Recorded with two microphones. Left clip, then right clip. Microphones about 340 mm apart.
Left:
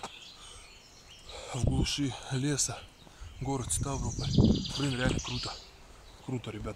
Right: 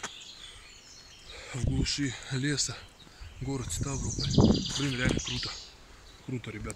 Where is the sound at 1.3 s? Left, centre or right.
Centre.